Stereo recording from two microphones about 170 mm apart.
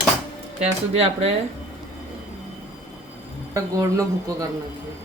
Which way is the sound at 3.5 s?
20° right (ahead or behind).